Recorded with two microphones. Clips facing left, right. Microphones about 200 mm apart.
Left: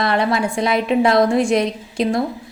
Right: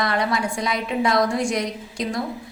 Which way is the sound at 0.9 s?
60° left (ahead or behind).